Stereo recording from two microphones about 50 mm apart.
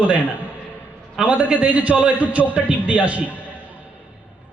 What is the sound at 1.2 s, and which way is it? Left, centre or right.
A man's voice, right.